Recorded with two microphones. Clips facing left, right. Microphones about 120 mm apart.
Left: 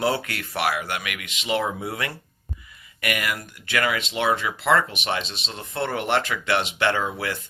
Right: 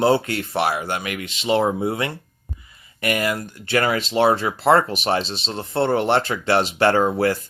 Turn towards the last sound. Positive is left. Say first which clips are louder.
# right 7 dB
turn(degrees=-40)  # may be behind; listen again after turning